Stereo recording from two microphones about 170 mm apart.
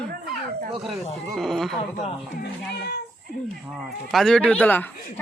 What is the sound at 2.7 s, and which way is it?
Speech, 80° left.